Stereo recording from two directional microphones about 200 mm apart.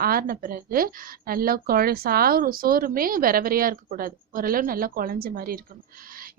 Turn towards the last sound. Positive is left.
turn(degrees=-50)  # may be behind; listen again after turning